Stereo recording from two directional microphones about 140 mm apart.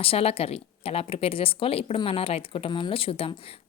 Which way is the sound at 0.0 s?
45° left (ahead or behind).